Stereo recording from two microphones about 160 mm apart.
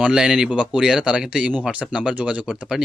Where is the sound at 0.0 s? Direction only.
5° right (ahead or behind).